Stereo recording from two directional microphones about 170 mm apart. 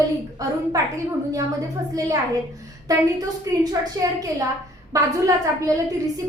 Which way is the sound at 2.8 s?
20° right (ahead or behind).